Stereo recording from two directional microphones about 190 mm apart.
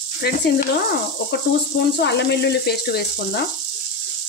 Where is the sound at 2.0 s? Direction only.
60° left (ahead or behind).